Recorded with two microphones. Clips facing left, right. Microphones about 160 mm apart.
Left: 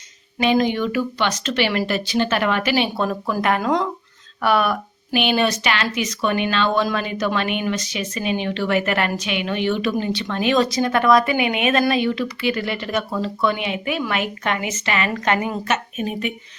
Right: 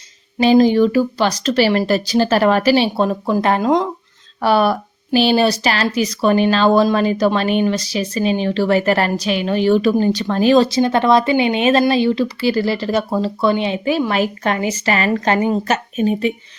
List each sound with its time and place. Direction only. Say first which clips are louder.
0.3 s a woman's voice: right 7 dB; 35° right (ahead or behind)